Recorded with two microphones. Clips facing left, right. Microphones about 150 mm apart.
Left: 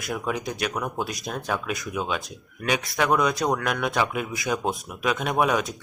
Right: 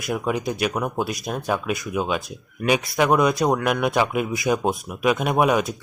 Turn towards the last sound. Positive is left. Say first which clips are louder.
# right 4 dB
turn(degrees=-10)  # may be behind; listen again after turning